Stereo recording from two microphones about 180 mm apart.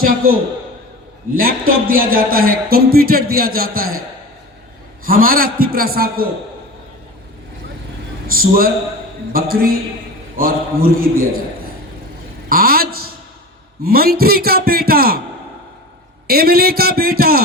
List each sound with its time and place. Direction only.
1.4 s speech: 55° right (ahead or behind)
5.0 s speech: 55° right (ahead or behind)
8.3 s a man's voice: 55° right (ahead or behind)
12.5 s speech: 55° right (ahead or behind)
16.2 s speech: 60° right (ahead or behind)